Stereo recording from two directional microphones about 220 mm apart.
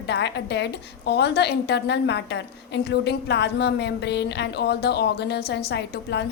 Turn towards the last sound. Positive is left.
turn(degrees=50)  # may be behind; listen again after turning